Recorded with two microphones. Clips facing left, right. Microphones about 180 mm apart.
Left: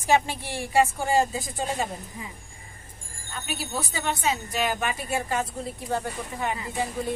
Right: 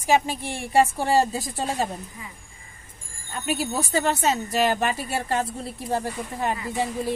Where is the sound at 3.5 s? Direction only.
45° right (ahead or behind).